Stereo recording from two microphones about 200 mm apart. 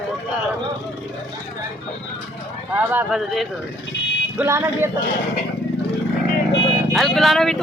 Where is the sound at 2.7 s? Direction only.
10° right (ahead or behind).